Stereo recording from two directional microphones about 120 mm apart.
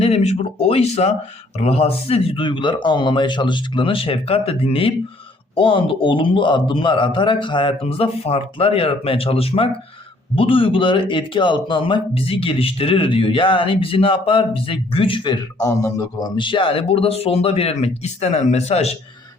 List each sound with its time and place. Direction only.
0.0 s a man's voice: 65° left (ahead or behind); by 15.4 s 45° left (ahead or behind)
15.6 s a man's voice: 25° left (ahead or behind); by 18.9 s 60° left (ahead or behind)